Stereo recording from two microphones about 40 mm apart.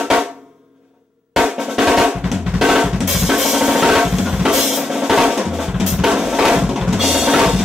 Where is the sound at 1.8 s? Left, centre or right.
Centre.